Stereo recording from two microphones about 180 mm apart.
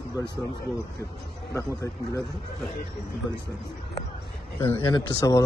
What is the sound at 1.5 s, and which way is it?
Speech, 20° left (ahead or behind).